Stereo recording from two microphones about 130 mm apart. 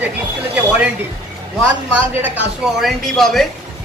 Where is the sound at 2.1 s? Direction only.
15° right (ahead or behind).